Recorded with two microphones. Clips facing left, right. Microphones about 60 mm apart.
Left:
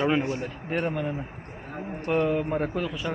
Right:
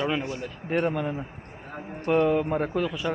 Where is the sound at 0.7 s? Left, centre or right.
Centre.